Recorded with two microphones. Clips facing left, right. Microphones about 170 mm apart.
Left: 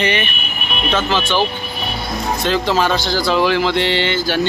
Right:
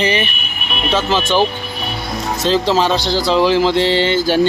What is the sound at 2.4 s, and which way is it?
Speech, 30° right (ahead or behind).